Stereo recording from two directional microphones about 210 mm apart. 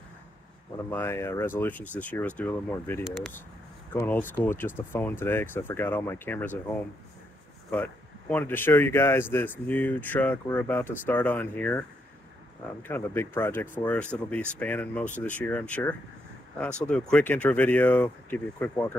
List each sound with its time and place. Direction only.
0.8 s speech: 10° left (ahead or behind)
7.7 s speech: 5° left (ahead or behind)
12.8 s speech: 10° left (ahead or behind)